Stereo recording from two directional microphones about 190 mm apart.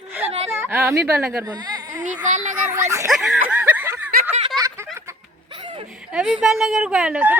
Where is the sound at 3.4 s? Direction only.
10° right (ahead or behind).